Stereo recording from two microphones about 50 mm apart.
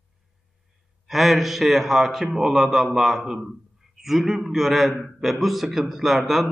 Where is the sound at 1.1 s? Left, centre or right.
Centre.